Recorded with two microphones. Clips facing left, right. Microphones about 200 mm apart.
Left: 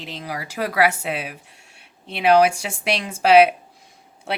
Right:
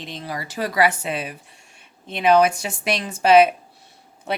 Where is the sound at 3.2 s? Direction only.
70° left (ahead or behind).